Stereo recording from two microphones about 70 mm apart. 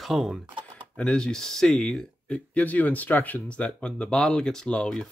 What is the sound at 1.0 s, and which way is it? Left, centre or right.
Speech, centre.